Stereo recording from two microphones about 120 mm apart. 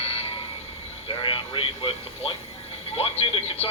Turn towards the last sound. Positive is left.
turn(degrees=55)  # may be behind; listen again after turning